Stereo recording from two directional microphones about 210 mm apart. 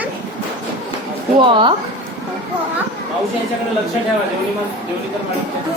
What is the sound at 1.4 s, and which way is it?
Speech, 25° right (ahead or behind).